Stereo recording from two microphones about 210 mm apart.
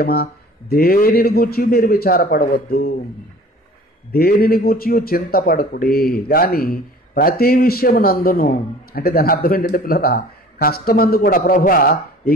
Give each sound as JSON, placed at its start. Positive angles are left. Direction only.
{"t": 0.0, "sound": "speech", "side_deg": 45}
{"t": 4.1, "sound": "speech", "side_deg": 45}